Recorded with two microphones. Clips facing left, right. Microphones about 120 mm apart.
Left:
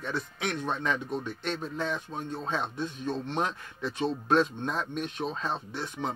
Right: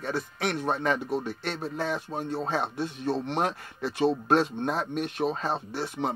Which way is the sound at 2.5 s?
65° right (ahead or behind).